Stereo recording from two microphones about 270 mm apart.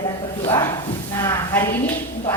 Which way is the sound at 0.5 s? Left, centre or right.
Centre.